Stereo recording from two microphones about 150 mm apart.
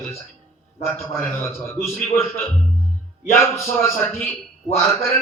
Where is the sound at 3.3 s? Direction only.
15° left (ahead or behind).